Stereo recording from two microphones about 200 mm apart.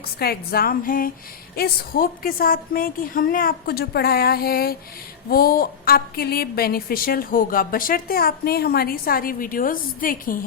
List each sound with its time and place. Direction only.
0.2 s a woman's voice: 50° left (ahead or behind)